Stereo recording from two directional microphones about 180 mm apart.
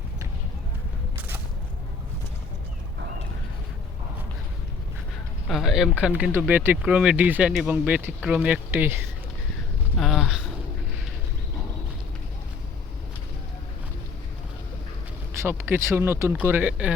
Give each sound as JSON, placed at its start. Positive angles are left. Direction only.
{"t": 5.5, "sound": "speech", "side_deg": 0}
{"t": 10.0, "sound": "a sound", "side_deg": 0}
{"t": 15.4, "sound": "speech", "side_deg": -15}